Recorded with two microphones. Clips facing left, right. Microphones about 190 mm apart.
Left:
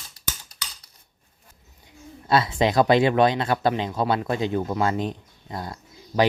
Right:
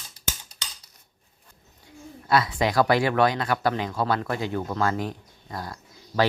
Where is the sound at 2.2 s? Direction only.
25° left (ahead or behind).